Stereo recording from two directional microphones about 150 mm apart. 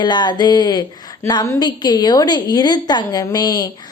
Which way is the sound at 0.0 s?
30° left (ahead or behind).